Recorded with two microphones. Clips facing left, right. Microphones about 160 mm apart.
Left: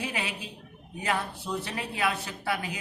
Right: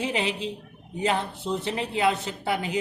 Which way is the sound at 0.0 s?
25° right (ahead or behind).